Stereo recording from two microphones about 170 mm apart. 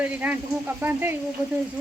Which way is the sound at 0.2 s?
5° right (ahead or behind).